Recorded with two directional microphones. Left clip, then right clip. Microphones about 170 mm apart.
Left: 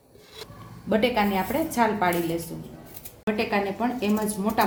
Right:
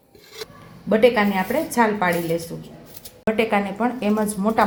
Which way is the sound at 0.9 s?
30° right (ahead or behind).